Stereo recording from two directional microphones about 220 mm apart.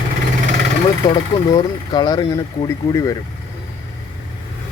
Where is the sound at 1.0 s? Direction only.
15° left (ahead or behind).